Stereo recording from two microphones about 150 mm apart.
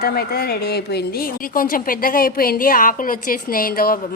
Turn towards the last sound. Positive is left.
turn(degrees=75)  # may be behind; listen again after turning